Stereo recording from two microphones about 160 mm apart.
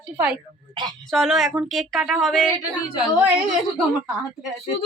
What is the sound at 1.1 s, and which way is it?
A woman's voice, centre (ahead or behind).